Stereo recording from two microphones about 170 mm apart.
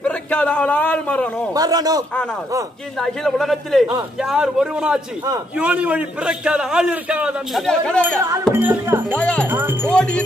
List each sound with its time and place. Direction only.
0.0 s a sound: 5° left (ahead or behind)
1.5 s speech: 20° right (ahead or behind)
3.0 s a man's voice: centre (ahead or behind)
8.2 s music: 15° right (ahead or behind)
9.1 s speech: 5° left (ahead or behind)
9.5 s music: 15° right (ahead or behind)
9.8 s a man's voice: 5° left (ahead or behind)